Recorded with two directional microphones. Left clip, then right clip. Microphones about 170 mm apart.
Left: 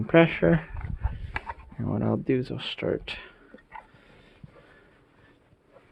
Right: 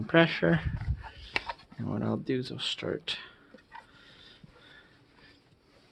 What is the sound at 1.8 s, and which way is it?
Speech, 15° left (ahead or behind).